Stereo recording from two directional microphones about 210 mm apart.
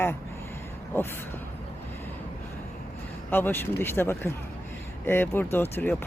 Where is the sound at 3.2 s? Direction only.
10° left (ahead or behind).